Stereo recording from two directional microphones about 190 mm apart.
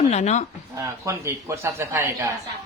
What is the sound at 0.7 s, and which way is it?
A man's voice, 15° right (ahead or behind).